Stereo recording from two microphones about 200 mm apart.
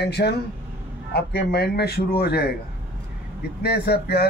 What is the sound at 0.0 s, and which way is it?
Speech, 55° left (ahead or behind).